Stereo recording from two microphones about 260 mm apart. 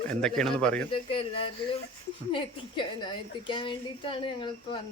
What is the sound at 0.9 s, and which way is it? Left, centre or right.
A woman's voice, left.